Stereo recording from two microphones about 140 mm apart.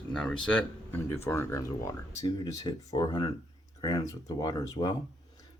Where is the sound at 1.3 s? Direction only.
20° left (ahead or behind).